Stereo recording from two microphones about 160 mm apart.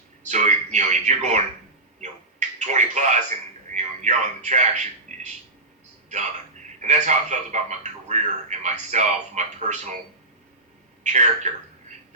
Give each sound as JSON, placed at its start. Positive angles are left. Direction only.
{"t": 0.3, "sound": "a man's voice", "side_deg": -50}
{"t": 6.8, "sound": "a man's voice", "side_deg": -45}
{"t": 11.0, "sound": "speech", "side_deg": -50}